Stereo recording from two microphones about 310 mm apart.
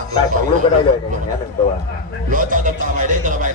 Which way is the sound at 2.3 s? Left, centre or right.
Right.